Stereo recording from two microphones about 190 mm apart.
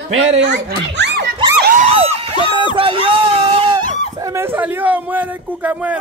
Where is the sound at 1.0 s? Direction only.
60° right (ahead or behind).